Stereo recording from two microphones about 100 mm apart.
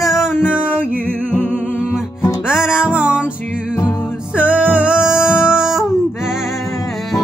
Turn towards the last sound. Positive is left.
turn(degrees=-5)  # may be behind; listen again after turning